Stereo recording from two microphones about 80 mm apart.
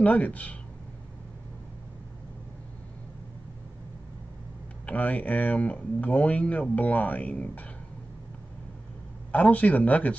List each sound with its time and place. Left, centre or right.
0.0 s speech: centre
4.8 s speech: centre
9.3 s speech: centre